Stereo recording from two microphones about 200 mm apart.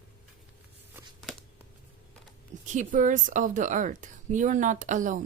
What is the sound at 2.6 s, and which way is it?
A woman's voice, 40° right (ahead or behind).